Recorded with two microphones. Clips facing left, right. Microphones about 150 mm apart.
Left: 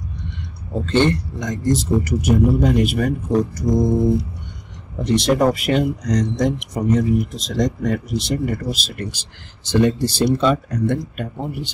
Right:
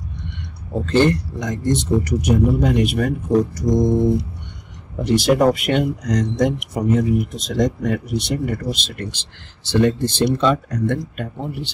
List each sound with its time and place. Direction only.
0.7 s speech: centre (ahead or behind)